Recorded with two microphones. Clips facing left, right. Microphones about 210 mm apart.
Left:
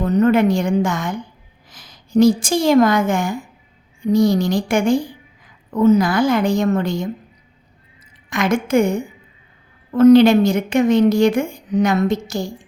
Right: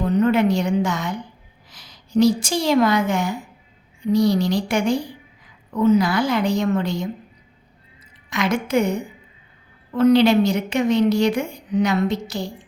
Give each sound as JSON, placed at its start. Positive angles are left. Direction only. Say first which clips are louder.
{"t": 0.0, "sound": "a woman's voice", "louder": "left 3 dB", "side_deg": 45}
{"t": 8.3, "sound": "a woman's voice", "louder": "left 3 dB", "side_deg": 50}